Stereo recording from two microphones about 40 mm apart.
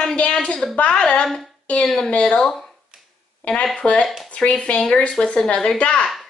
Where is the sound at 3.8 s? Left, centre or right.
Left.